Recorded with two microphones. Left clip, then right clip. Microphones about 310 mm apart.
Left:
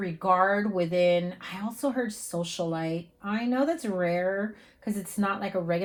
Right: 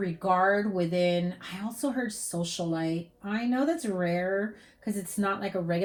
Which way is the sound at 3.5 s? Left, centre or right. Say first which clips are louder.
Left 1 dB; left.